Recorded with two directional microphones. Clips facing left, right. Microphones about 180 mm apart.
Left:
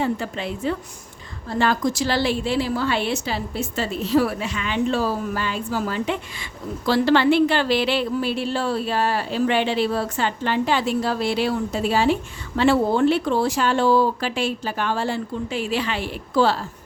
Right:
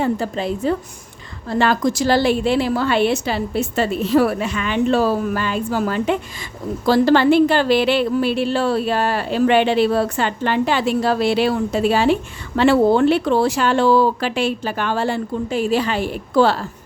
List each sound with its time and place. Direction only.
0.0 s a woman's voice: 40° right (ahead or behind)
1.5 s speech: 75° right (ahead or behind)
2.0 s a woman's voice: 50° right (ahead or behind)
6.8 s a woman's voice: 45° right (ahead or behind); by 15.2 s 65° right (ahead or behind)
15.4 s a woman's voice: 45° right (ahead or behind); by 16.6 s 60° right (ahead or behind)